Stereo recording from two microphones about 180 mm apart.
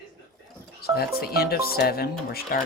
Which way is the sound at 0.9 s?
60° left (ahead or behind).